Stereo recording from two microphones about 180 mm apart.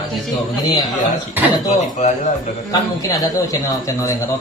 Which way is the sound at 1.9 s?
40° left (ahead or behind).